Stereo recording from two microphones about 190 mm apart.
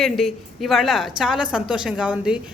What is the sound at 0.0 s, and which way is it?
Speech, centre (ahead or behind).